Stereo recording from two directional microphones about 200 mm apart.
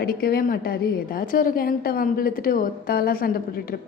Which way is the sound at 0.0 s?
50° left (ahead or behind).